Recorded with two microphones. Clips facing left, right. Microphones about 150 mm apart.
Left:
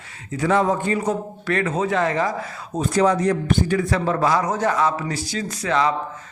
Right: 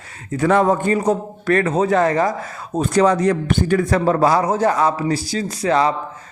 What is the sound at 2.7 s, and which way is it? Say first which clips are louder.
Speech: right 3 dB; 65° right (ahead or behind).